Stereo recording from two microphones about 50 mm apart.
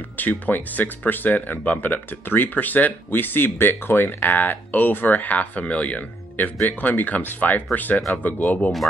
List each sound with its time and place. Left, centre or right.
0.2 s speech: left